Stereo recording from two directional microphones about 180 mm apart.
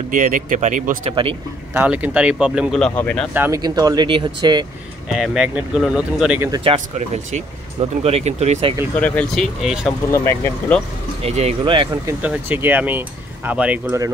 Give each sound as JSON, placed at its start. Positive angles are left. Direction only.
{"t": 0.1, "sound": "speech", "side_deg": -45}
{"t": 1.2, "sound": "speech", "side_deg": -35}
{"t": 1.7, "sound": "speech", "side_deg": -10}
{"t": 3.0, "sound": "speech", "side_deg": 10}
{"t": 3.3, "sound": "speech", "side_deg": -10}
{"t": 5.1, "sound": "speech", "side_deg": -5}
{"t": 6.5, "sound": "speech", "side_deg": -30}
{"t": 8.0, "sound": "speech", "side_deg": -35}
{"t": 8.9, "sound": "speech", "side_deg": 5}
{"t": 10.1, "sound": "speech", "side_deg": 15}
{"t": 11.2, "sound": "speech", "side_deg": -35}
{"t": 12.1, "sound": "speech", "side_deg": -10}